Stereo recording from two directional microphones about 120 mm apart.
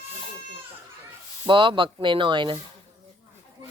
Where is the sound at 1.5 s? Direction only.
45° right (ahead or behind).